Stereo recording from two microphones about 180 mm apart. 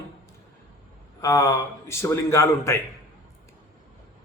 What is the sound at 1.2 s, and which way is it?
A man's voice, 15° left (ahead or behind).